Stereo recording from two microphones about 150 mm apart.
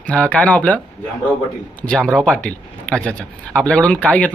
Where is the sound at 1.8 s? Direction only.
5° left (ahead or behind).